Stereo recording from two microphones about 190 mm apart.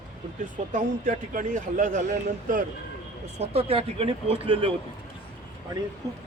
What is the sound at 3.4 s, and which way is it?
Speech, 30° right (ahead or behind).